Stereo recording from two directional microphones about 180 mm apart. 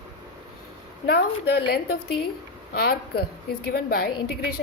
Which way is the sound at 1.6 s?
60° left (ahead or behind).